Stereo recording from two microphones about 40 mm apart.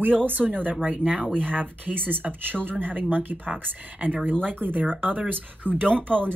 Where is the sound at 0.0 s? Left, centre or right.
Right.